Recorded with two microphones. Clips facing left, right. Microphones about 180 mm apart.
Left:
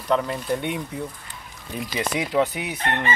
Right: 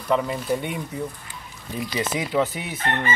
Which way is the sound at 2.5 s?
15° left (ahead or behind).